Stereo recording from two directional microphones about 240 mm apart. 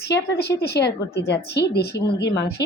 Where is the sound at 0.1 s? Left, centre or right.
Left.